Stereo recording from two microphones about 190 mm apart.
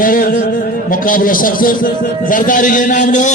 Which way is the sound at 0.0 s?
50° left (ahead or behind).